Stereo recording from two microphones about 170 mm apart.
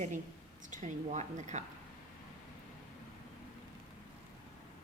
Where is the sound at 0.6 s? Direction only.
45° right (ahead or behind).